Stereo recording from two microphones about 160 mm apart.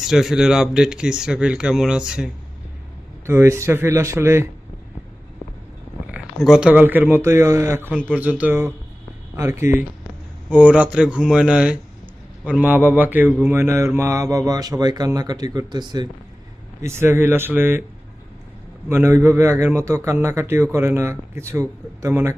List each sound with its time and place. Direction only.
0.0 s speech: centre (ahead or behind)
3.2 s a man's voice: 15° right (ahead or behind)
6.1 s a man's voice: 5° right (ahead or behind)
12.5 s mantra: 10° right (ahead or behind); by 16.0 s 25° right (ahead or behind)
16.8 s a man's voice: 15° right (ahead or behind)
18.9 s a man's voice: 15° right (ahead or behind)